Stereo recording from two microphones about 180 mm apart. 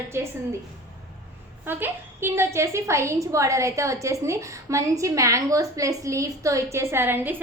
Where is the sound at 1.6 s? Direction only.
10° right (ahead or behind).